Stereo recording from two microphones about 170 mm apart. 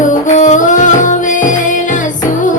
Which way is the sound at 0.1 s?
45° left (ahead or behind).